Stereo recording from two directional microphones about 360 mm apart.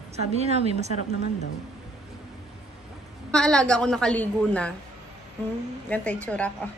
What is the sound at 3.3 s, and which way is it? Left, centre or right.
A woman's voice, centre.